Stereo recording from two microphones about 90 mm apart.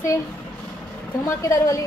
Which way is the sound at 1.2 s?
25° left (ahead or behind).